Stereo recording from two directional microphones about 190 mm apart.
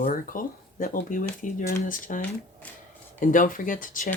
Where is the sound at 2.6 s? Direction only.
5° left (ahead or behind).